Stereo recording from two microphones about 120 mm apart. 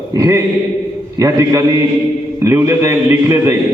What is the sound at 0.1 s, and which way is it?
A man's voice, 25° right (ahead or behind).